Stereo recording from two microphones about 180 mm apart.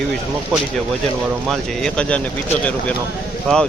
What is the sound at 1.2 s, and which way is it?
Speech, centre (ahead or behind).